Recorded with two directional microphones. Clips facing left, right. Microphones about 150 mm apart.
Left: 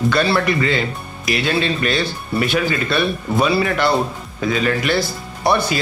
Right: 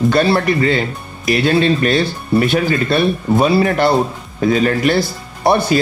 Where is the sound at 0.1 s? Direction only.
40° right (ahead or behind).